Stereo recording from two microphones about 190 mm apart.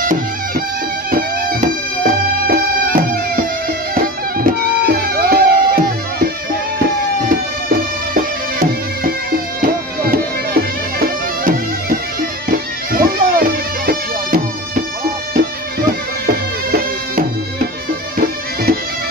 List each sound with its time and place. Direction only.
1.1 s music: 50° right (ahead or behind)
8.1 s music: 50° right (ahead or behind)